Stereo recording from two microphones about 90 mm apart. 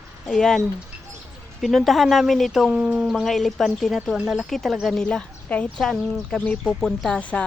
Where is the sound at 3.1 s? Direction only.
Centre (ahead or behind).